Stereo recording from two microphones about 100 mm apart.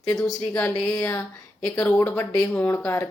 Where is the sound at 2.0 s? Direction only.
25° left (ahead or behind).